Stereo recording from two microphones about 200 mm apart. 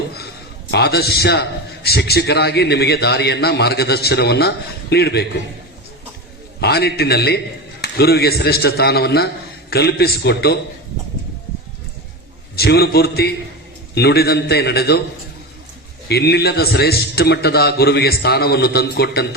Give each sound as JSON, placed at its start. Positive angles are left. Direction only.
{"t": 0.7, "sound": "a man's voice", "side_deg": 55}
{"t": 6.6, "sound": "a man's voice", "side_deg": 55}
{"t": 12.5, "sound": "a man's voice", "side_deg": 50}
{"t": 16.0, "sound": "a man's voice", "side_deg": 55}